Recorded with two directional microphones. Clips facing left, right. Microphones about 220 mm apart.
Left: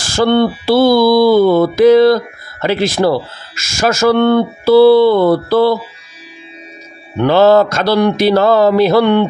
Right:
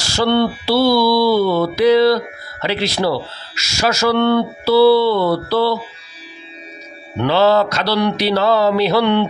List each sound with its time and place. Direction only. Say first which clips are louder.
0.0 s speech: left 4 dB; 50° left (ahead or behind)
7.2 s speech: left 5 dB; 50° left (ahead or behind)